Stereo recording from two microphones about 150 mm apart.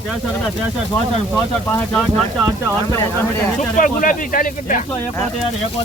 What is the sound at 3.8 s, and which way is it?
Speech, 65° left (ahead or behind).